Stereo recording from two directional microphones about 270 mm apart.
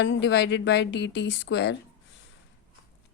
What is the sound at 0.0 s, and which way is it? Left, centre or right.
Speech, left.